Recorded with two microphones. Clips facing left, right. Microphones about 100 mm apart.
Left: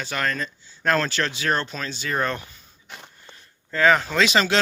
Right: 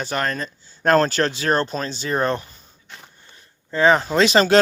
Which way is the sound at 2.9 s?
Centre (ahead or behind).